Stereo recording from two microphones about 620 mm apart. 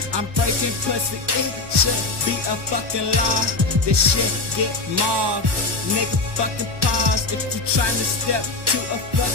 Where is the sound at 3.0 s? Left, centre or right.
Right.